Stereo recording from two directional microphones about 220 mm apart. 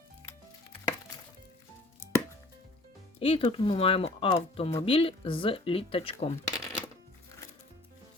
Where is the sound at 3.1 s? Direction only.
25° left (ahead or behind).